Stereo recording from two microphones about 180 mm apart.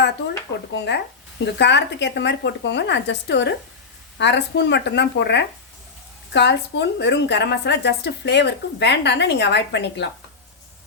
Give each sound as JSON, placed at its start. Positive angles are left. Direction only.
{"t": 0.7, "sound": "a woman's voice", "side_deg": 70}